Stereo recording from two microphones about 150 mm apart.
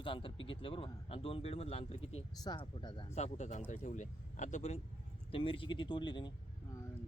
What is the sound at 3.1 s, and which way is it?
Speech, 50° left (ahead or behind).